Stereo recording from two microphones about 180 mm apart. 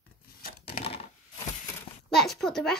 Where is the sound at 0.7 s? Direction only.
30° left (ahead or behind).